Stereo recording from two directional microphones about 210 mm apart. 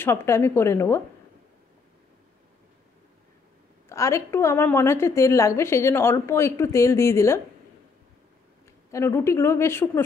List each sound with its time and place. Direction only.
0.0 s a woman's voice: 10° left (ahead or behind)
3.9 s a woman's voice: 15° left (ahead or behind)
8.9 s a woman's voice: 15° left (ahead or behind)